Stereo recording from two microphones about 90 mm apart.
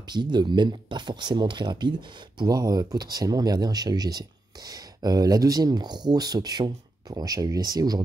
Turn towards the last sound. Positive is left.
turn(degrees=-50)  # may be behind; listen again after turning